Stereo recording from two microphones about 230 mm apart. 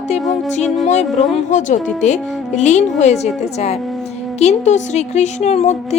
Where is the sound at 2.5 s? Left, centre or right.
Left.